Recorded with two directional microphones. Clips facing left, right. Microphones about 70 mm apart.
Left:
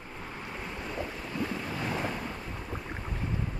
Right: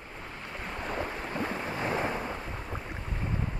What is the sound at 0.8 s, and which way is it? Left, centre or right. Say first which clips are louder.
Waves: right 4 dB; right.